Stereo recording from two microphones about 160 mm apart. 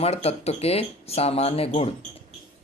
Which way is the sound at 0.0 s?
40° left (ahead or behind).